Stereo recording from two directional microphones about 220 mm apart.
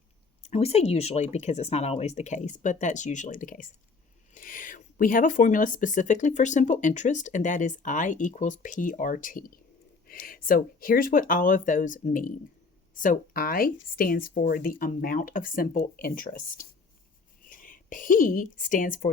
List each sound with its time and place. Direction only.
0.4 s speech: 25° left (ahead or behind)